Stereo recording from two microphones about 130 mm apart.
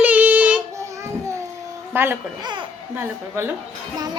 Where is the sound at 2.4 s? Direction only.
35° right (ahead or behind).